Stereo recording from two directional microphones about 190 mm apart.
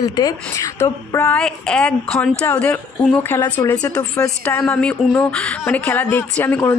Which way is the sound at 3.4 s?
15° left (ahead or behind).